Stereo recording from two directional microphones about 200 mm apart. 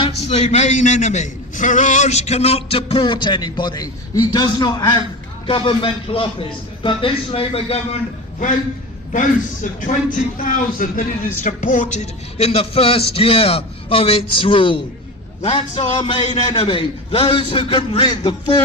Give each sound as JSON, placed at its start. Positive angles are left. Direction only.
{"t": 0.0, "sound": "a man's voice", "side_deg": 30}
{"t": 9.8, "sound": "a man's voice", "side_deg": 40}